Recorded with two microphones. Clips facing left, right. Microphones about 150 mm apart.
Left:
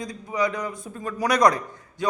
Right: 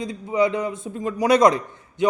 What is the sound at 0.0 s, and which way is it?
A man's voice, 25° right (ahead or behind).